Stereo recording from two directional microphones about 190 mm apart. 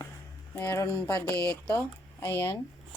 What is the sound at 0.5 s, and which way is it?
Speech, 15° left (ahead or behind).